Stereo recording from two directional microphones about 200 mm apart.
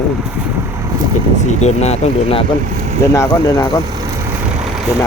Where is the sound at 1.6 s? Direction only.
35° left (ahead or behind).